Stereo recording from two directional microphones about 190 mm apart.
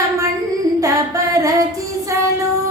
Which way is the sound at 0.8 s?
15° right (ahead or behind).